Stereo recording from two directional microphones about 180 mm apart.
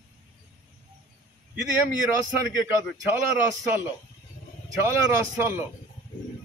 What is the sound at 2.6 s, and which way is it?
Speech, 15° right (ahead or behind).